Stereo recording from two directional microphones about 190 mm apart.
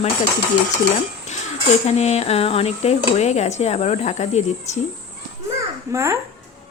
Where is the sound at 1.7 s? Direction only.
35° left (ahead or behind).